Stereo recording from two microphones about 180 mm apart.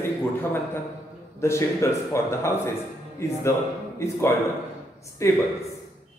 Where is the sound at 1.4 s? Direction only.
15° left (ahead or behind).